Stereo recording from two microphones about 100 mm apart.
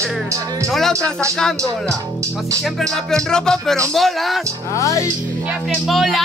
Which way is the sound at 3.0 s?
5° left (ahead or behind).